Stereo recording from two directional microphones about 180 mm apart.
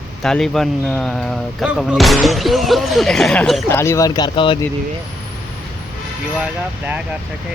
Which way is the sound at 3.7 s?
15° left (ahead or behind).